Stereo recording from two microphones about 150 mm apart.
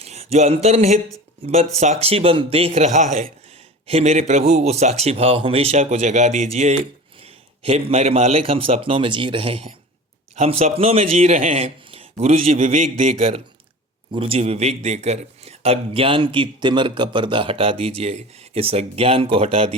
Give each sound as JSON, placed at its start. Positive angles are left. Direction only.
{"t": 0.0, "sound": "a man's voice", "side_deg": -45}